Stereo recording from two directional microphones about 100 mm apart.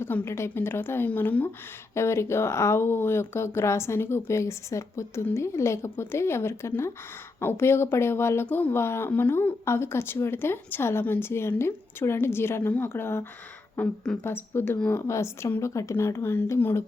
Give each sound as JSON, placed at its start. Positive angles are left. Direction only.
{"t": 0.0, "sound": "speech", "side_deg": 25}
{"t": 13.7, "sound": "speech", "side_deg": 5}
{"t": 14.3, "sound": "speech", "side_deg": 20}